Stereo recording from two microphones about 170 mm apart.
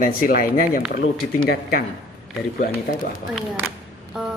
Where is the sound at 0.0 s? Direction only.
55° left (ahead or behind).